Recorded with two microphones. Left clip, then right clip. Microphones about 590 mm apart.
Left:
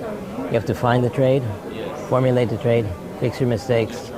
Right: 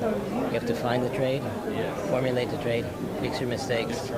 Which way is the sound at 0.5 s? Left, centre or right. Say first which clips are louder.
Left 10 dB; left.